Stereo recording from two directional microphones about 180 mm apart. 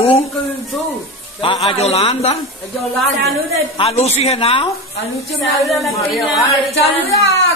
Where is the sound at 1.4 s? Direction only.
30° left (ahead or behind).